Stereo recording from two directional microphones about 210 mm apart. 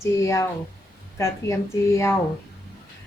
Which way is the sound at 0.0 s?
15° left (ahead or behind).